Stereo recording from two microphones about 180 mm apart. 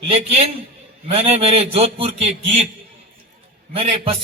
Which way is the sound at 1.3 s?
35° right (ahead or behind).